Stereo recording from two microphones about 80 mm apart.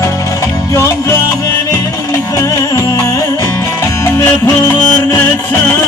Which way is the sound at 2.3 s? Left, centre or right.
Left.